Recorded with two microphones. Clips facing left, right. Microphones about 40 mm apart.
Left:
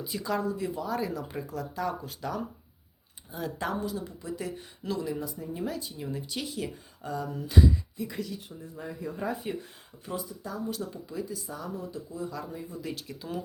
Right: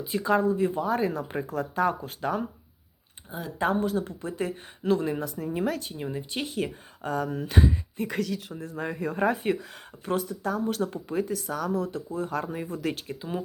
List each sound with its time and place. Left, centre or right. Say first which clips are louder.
0.0 s speech: right 6 dB; right
3.6 s speech: right 9 dB; right
6.1 s speech: right 3 dB; right
8.0 s speech: right 9 dB; right
12.6 s speech: right 7 dB; right
12.9 s speech: right 5 dB; right